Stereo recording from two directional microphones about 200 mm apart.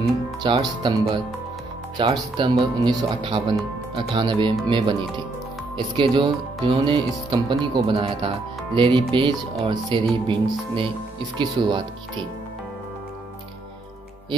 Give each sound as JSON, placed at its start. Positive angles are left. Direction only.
{"t": 0.4, "sound": "speech", "side_deg": -20}